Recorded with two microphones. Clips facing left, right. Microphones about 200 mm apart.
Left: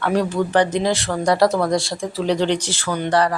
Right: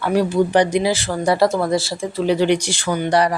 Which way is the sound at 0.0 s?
5° right (ahead or behind).